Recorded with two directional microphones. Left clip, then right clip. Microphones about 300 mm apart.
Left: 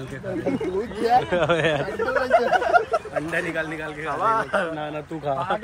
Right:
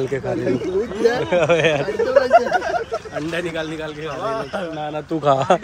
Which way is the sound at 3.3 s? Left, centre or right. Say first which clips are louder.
Right 1 dB; centre.